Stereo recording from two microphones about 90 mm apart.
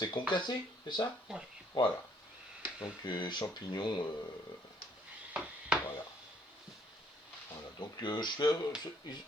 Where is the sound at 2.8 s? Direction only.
60° left (ahead or behind).